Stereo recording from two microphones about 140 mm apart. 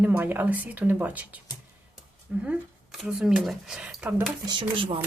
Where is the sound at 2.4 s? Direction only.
5° right (ahead or behind).